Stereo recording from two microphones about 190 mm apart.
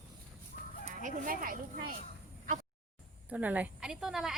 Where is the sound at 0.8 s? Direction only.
40° right (ahead or behind).